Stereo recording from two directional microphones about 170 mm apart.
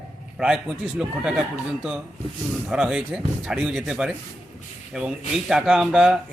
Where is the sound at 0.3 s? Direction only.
5° right (ahead or behind).